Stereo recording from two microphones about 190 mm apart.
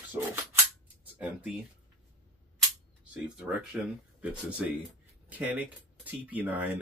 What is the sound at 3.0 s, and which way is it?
Speech, 5° right (ahead or behind).